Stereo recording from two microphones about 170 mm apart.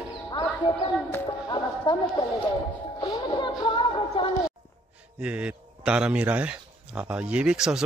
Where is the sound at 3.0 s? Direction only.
25° left (ahead or behind).